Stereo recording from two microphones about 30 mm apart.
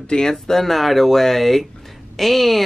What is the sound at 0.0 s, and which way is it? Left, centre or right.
Speech, left.